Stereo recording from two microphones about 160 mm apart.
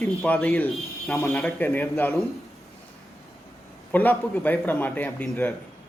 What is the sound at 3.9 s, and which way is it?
A man's voice, 10° left (ahead or behind).